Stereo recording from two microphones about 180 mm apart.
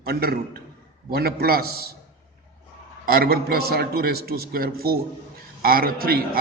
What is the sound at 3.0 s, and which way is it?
A man's voice, 55° right (ahead or behind).